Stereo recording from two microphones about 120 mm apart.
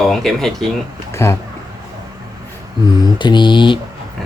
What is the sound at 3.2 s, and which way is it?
Speech, 40° left (ahead or behind).